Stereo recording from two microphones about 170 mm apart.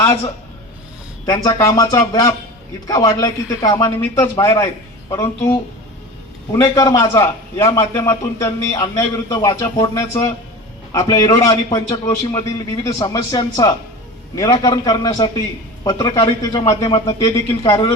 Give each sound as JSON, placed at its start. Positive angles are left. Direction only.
{"t": 1.2, "sound": "a man's voice", "side_deg": 20}